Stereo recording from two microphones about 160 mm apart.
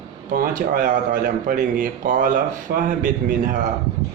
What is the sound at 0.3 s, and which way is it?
A man's voice, 60° right (ahead or behind).